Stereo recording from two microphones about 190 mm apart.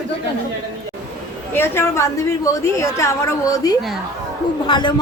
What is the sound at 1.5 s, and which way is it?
A woman's voice, 10° left (ahead or behind).